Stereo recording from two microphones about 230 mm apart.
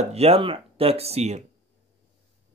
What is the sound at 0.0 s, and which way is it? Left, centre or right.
Speech, right.